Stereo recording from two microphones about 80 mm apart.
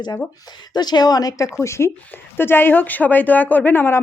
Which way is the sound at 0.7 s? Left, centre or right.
Left.